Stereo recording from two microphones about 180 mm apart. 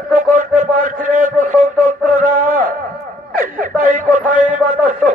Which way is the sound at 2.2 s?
45° right (ahead or behind).